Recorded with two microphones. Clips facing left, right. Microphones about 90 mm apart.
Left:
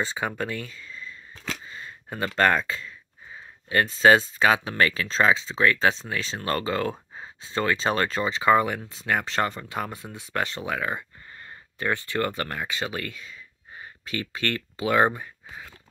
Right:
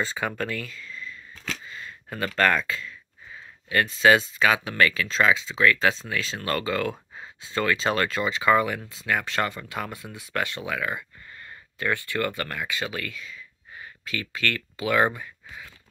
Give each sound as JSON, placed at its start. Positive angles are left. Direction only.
{"t": 0.0, "sound": "speech", "side_deg": 20}